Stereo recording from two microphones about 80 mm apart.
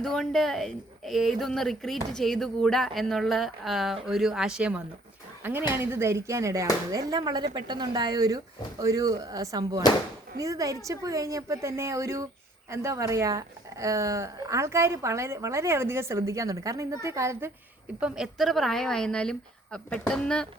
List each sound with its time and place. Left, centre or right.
0.0 s speech: centre
5.4 s a woman's voice: right
6.9 s a woman's voice: right
18.0 s a woman's voice: centre